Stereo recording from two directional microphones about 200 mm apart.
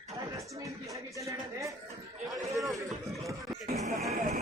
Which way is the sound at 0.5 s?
15° right (ahead or behind).